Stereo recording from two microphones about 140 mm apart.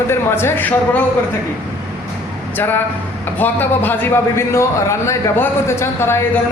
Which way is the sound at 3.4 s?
15° left (ahead or behind).